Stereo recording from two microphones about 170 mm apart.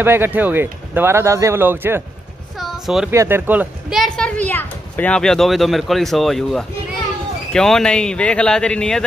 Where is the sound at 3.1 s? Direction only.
15° right (ahead or behind).